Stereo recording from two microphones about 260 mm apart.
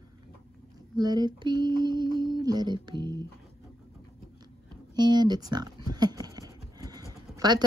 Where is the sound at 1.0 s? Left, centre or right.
Centre.